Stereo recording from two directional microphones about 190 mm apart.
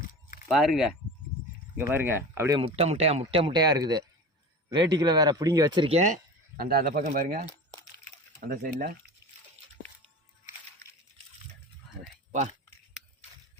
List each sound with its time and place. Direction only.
0.1 s a sound: 50° left (ahead or behind)
0.4 s speech: centre (ahead or behind)
2.6 s speech: 30° right (ahead or behind)
6.6 s speech: 50° right (ahead or behind)
8.4 s speech: 55° right (ahead or behind)
12.3 s speech: 40° right (ahead or behind)